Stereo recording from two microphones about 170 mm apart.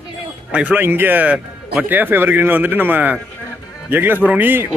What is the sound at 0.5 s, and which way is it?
Speech, 5° right (ahead or behind).